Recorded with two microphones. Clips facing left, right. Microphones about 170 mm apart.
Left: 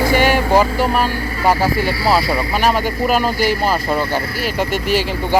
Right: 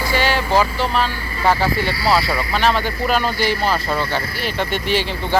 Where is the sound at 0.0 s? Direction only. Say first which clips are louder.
Left 5 dB; 50° left (ahead or behind).